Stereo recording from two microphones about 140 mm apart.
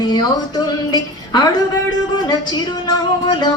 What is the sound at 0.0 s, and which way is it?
A woman's voice, 30° left (ahead or behind).